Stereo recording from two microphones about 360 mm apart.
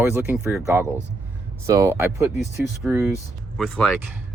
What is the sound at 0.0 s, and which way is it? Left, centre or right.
Speech, centre.